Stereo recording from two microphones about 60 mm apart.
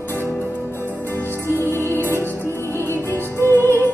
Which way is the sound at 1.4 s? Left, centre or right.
Left.